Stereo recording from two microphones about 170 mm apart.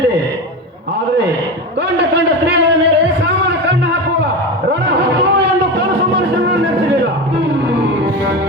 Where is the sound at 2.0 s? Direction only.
90° right.